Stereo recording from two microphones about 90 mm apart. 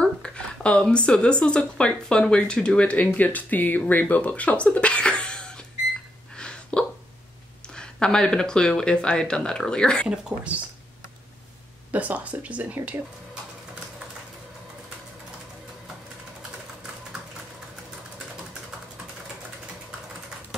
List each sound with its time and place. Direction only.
0.0 s speech: 10° left (ahead or behind)
6.3 s hiccup: 10° left (ahead or behind)
7.7 s speech: 10° left (ahead or behind)
10.0 s speech: 10° right (ahead or behind)
11.9 s speech: 15° right (ahead or behind)